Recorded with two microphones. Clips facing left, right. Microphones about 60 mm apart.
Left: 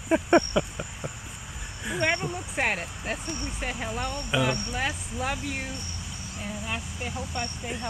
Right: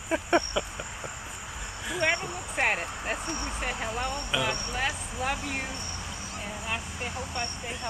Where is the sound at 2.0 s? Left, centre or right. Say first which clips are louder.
Left 1 dB; centre.